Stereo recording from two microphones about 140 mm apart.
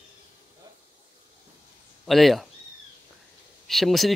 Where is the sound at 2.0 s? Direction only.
Centre (ahead or behind).